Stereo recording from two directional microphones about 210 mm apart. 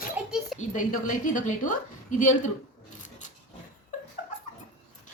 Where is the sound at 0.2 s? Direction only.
5° right (ahead or behind).